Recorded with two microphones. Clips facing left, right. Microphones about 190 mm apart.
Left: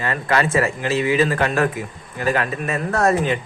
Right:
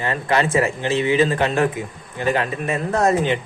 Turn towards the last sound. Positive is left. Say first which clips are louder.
# even
turn(degrees=-20)  # may be behind; listen again after turning